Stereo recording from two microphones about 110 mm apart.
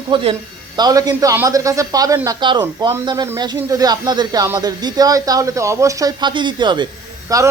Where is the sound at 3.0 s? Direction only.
30° right (ahead or behind).